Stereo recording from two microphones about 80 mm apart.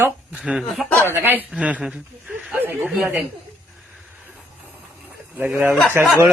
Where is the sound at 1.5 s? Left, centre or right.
Centre.